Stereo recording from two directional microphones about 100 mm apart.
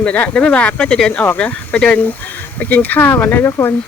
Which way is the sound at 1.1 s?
20° left (ahead or behind).